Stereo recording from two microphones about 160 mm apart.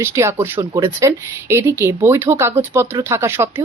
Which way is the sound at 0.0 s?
15° right (ahead or behind).